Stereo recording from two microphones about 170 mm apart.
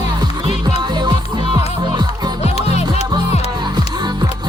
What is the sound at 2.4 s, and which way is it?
Music, 40° left (ahead or behind).